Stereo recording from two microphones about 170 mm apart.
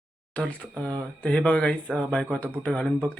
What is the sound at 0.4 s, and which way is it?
A man's voice, 5° left (ahead or behind).